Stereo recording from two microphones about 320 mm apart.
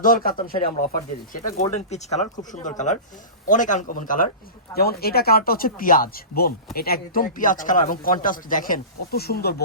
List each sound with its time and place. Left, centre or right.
0.0 s speech: left
1.6 s speech: centre